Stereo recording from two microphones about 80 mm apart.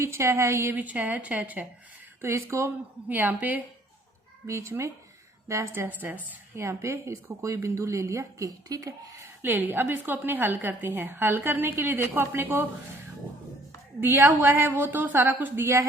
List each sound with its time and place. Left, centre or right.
0.0 s a woman's voice: right
0.8 s a woman's voice: centre
2.2 s a woman's voice: right
3.1 s a woman's voice: right
4.4 s a woman's voice: right
6.6 s a woman's voice: right
9.2 s a woman's voice: right
14.0 s a woman's voice: right